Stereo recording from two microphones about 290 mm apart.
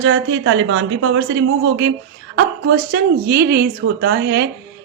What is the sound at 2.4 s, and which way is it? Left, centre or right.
A woman's voice, right.